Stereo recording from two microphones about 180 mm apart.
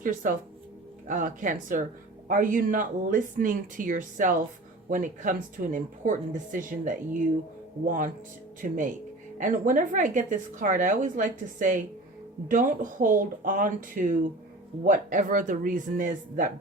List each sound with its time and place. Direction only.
0.0 s a woman's voice: 50° right (ahead or behind)